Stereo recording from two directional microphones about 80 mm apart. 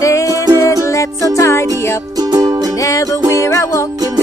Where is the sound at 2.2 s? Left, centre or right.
Right.